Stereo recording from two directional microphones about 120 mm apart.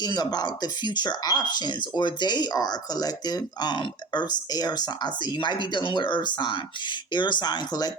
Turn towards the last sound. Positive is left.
turn(degrees=35)  # may be behind; listen again after turning